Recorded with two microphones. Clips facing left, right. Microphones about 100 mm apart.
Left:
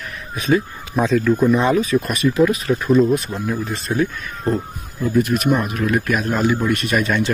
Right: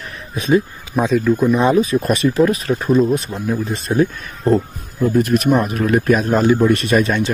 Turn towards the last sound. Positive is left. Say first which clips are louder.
# right 3 dB
turn(degrees=-20)  # may be behind; listen again after turning